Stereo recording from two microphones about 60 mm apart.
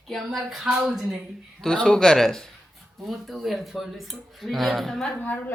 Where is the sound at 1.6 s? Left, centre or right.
Centre.